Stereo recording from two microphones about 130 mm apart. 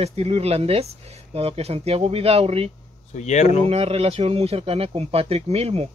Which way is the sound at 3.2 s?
60° left (ahead or behind).